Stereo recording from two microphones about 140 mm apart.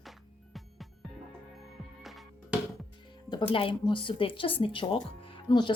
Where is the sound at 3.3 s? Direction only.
40° left (ahead or behind).